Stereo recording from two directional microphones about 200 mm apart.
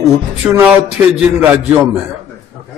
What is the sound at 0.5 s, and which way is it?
A man's voice, 10° right (ahead or behind).